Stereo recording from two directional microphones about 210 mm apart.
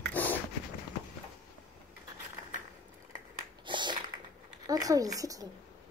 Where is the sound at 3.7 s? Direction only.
20° right (ahead or behind).